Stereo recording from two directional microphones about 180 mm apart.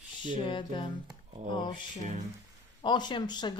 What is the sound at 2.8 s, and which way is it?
Speech, 25° left (ahead or behind).